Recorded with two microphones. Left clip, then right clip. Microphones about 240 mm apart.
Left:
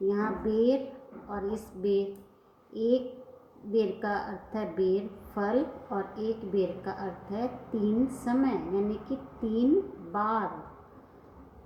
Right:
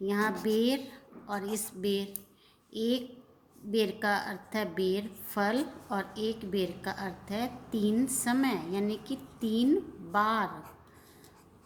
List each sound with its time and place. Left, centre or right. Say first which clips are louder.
0.1 s a woman's voice: even; right